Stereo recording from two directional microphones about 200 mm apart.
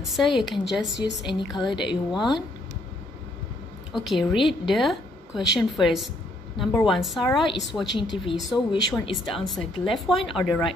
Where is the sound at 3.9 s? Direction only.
Centre (ahead or behind).